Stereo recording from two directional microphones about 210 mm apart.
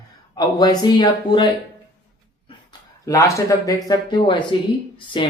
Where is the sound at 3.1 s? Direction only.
15° left (ahead or behind).